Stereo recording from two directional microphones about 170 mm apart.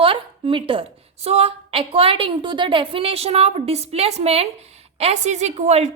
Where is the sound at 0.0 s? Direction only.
30° right (ahead or behind).